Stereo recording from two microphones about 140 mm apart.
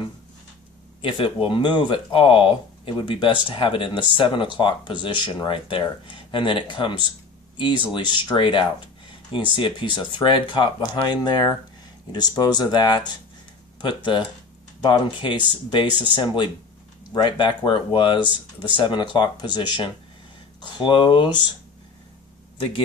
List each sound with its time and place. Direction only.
1.0 s speech: 35° left (ahead or behind)